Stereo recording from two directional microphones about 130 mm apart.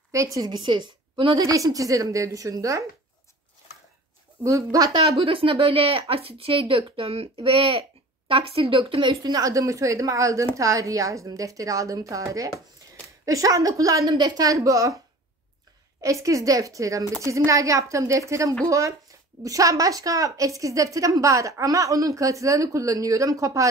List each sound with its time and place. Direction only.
0.1 s a woman's voice: 25° right (ahead or behind)
4.4 s a woman's voice: 25° right (ahead or behind)
5.0 s a woman's voice: 45° right (ahead or behind)
9.1 s a woman's voice: 30° right (ahead or behind)
16.0 s a woman's voice: 25° right (ahead or behind)